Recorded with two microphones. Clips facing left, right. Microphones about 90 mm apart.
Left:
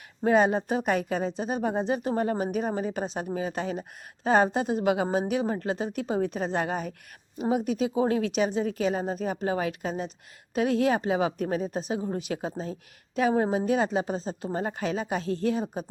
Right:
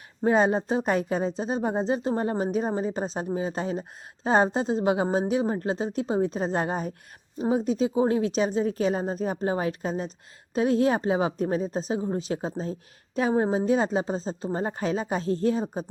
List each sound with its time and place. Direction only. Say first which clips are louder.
0.3 s a woman's voice: even; 30° right (ahead or behind)